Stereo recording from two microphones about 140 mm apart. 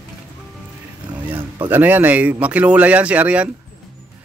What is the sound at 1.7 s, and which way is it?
Speech, 15° right (ahead or behind).